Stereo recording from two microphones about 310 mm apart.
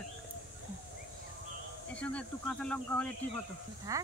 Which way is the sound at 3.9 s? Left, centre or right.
Centre.